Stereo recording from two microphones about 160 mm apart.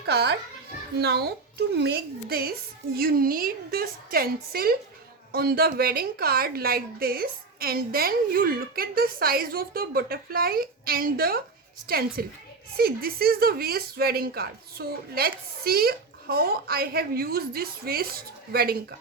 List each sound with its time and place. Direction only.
0.0 s children playing: 90° right
0.9 s speech: 80° right